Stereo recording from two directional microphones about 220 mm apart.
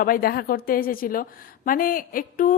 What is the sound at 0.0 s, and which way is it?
A woman's voice, 40° left (ahead or behind).